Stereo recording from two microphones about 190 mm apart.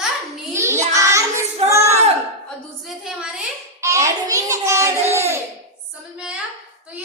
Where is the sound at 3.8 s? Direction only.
15° right (ahead or behind).